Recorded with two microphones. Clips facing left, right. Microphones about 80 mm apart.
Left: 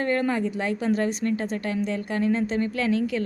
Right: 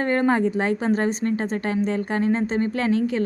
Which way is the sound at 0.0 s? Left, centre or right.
Right.